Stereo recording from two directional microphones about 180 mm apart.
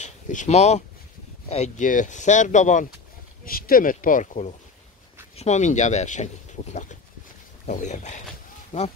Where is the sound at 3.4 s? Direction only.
55° left (ahead or behind).